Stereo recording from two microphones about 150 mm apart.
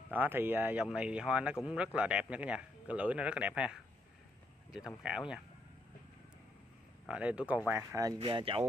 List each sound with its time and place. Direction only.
0.1 s speech: 10° right (ahead or behind)
7.1 s speech: 10° right (ahead or behind)
8.2 s speech: 35° right (ahead or behind)